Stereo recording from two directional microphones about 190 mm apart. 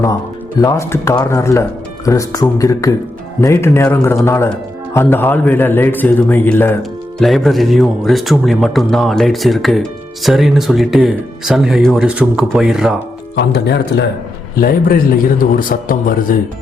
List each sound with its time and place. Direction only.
0.6 s a man's voice: 15° left (ahead or behind); by 13.0 s 5° right (ahead or behind)
13.3 s a man's voice: 60° left (ahead or behind)